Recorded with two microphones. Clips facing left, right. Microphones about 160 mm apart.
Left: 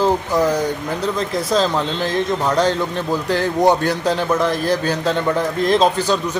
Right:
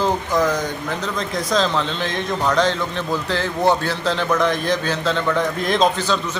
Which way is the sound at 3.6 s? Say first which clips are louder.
Left 2 dB; 15° left (ahead or behind).